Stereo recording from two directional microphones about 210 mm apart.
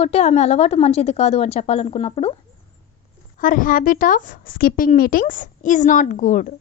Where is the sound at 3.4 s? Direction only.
40° left (ahead or behind).